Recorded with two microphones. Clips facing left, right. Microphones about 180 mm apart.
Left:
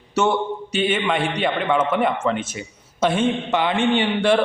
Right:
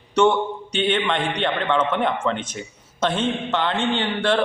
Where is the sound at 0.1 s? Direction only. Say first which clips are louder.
Right 2 dB; 5° left (ahead or behind).